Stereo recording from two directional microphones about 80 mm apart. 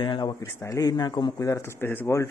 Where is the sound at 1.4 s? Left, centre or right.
Left.